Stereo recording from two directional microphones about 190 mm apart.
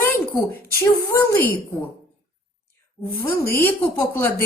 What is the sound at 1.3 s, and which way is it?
Speech, 10° left (ahead or behind).